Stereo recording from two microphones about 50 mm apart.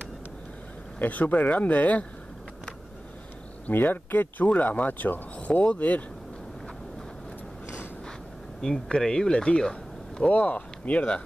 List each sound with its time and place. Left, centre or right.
0.9 s speech: left
3.6 s speech: left
4.5 s speech: left
5.5 s speech: left
8.5 s speech: centre
10.3 s speech: left